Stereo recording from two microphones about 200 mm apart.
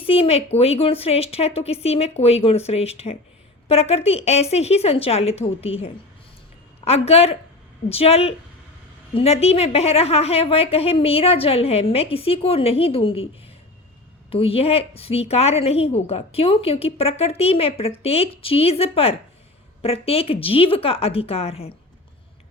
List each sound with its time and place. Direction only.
0.0 s a woman's voice: 30° left (ahead or behind)
14.3 s a woman's voice: 30° left (ahead or behind)